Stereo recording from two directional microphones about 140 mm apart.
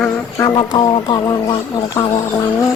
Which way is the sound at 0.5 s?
30° left (ahead or behind).